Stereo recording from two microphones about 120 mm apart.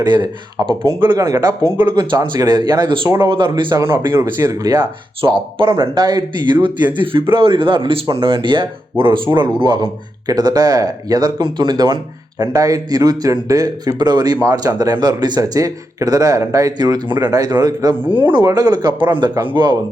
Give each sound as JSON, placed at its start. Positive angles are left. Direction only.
{"t": 0.0, "sound": "speech", "side_deg": -40}
{"t": 3.8, "sound": "a man's voice", "side_deg": -20}